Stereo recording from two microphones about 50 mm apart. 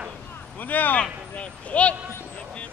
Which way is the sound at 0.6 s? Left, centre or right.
Left.